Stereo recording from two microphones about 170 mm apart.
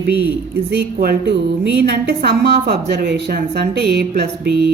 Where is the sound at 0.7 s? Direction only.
65° right (ahead or behind).